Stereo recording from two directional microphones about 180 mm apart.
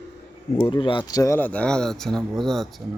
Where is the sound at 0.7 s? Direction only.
25° left (ahead or behind); by 2.8 s centre (ahead or behind).